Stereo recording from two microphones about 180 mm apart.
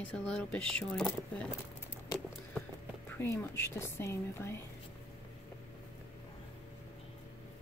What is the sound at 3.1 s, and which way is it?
Speech, 15° left (ahead or behind).